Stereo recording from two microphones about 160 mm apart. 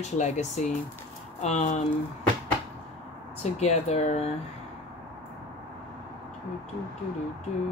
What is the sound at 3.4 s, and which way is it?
Speech, 45° left (ahead or behind).